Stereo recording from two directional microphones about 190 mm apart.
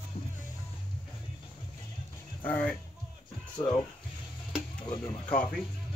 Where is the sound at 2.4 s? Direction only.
10° left (ahead or behind).